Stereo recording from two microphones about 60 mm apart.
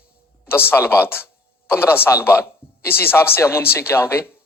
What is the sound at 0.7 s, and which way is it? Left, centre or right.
A woman's voice, left.